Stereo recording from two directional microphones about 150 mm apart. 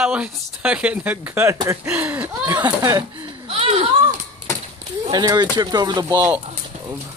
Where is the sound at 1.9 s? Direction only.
10° right (ahead or behind).